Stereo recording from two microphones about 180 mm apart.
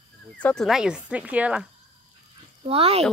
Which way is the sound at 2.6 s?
35° right (ahead or behind).